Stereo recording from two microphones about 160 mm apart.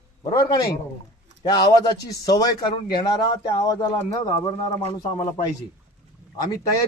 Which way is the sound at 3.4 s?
25° left (ahead or behind).